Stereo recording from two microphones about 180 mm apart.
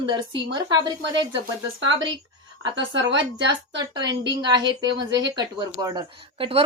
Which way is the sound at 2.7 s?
90° right.